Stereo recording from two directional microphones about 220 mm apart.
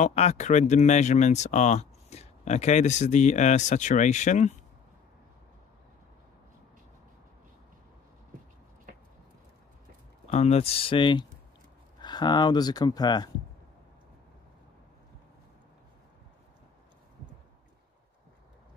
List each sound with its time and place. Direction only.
0.0 s speech: 30° left (ahead or behind)
10.3 s speech: 30° left (ahead or behind)